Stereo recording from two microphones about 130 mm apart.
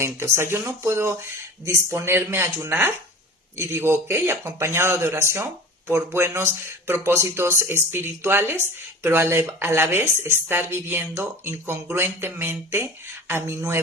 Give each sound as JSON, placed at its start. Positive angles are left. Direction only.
{"t": 0.0, "sound": "speech", "side_deg": -20}